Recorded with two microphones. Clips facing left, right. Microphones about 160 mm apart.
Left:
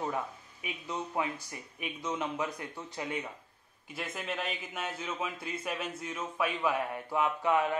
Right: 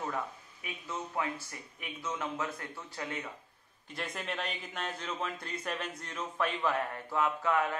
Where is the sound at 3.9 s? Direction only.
Centre (ahead or behind).